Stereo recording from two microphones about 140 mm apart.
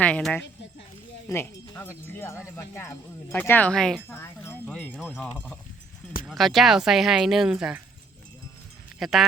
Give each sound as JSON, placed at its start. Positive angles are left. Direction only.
{"t": 0.0, "sound": "speech", "side_deg": 5}
{"t": 1.3, "sound": "speech", "side_deg": 15}
{"t": 4.2, "sound": "speech", "side_deg": 15}
{"t": 4.9, "sound": "speech", "side_deg": 0}
{"t": 9.0, "sound": "speech", "side_deg": 0}